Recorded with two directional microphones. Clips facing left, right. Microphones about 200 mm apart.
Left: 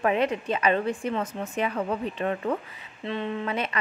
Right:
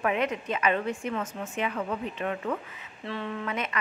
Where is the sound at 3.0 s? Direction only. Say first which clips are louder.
Left 4 dB; 20° left (ahead or behind).